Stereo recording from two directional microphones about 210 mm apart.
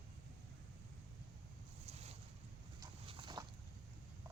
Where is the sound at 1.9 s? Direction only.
30° right (ahead or behind).